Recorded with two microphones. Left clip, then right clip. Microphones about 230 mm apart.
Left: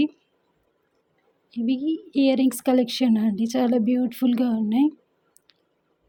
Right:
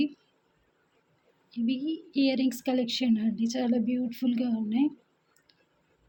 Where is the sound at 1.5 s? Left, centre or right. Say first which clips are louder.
Left 6 dB; left.